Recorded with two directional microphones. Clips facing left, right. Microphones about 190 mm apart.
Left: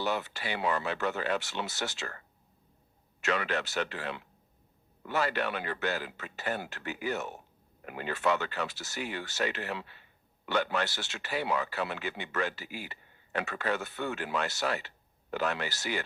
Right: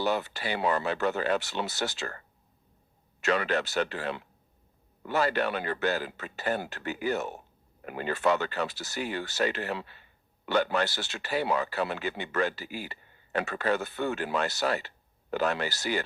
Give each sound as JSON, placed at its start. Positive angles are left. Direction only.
{"t": 0.0, "sound": "speech", "side_deg": -35}